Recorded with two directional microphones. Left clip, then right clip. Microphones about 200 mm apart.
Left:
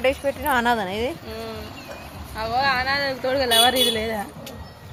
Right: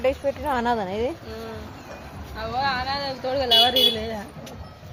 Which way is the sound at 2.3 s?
20° left (ahead or behind).